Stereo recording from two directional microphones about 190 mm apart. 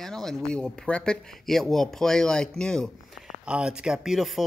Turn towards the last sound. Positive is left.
turn(degrees=0)  # may be behind; listen again after turning